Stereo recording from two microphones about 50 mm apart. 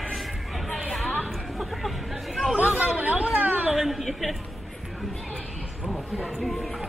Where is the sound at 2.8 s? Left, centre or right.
Right.